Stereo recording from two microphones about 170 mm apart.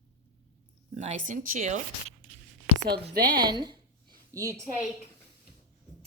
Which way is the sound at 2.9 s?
75° right (ahead or behind).